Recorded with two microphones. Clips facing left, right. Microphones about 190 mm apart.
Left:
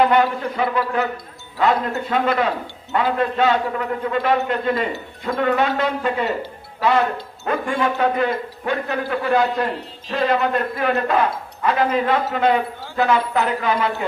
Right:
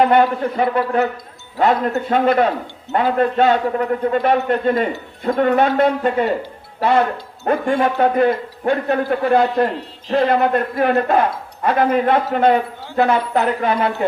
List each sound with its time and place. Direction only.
0.1 s a man's voice: 50° right (ahead or behind)
6.7 s a man's voice: 35° right (ahead or behind); by 13.9 s 55° right (ahead or behind)